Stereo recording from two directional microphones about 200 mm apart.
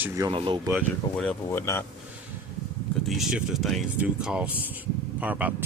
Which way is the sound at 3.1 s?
Centre (ahead or behind).